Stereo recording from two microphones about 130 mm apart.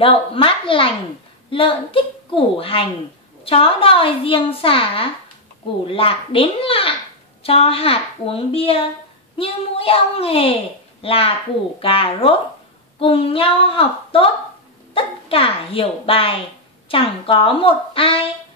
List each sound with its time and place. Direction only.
0.0 s a child's voice: 45° left (ahead or behind)